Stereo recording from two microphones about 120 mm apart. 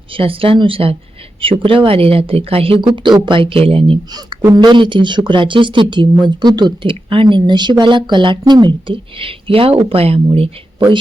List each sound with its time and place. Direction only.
0.1 s speech: 50° right (ahead or behind)
4.1 s speech: 35° right (ahead or behind)